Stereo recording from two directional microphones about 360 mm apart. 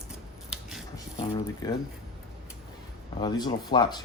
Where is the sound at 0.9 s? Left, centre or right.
Centre.